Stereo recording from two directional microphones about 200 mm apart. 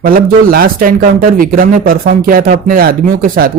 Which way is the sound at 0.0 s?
45° right (ahead or behind).